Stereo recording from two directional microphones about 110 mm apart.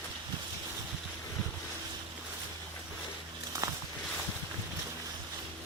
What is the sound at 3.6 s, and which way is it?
Walk, 25° right (ahead or behind).